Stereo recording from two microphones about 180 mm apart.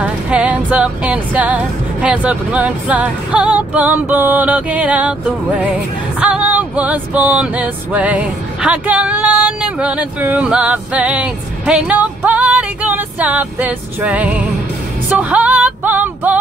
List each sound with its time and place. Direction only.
0.0 s music: 5° right (ahead or behind)
6.1 s music: 5° right (ahead or behind)